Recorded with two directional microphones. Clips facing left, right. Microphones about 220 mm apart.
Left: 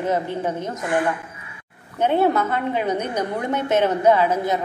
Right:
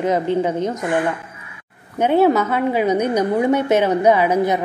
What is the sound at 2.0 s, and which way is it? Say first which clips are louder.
A woman's voice: right 4 dB; 10° right (ahead or behind).